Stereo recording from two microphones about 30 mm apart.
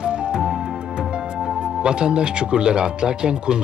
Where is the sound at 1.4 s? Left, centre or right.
Right.